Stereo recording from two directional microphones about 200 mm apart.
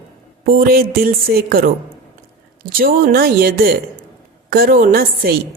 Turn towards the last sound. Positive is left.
turn(degrees=-45)  # may be behind; listen again after turning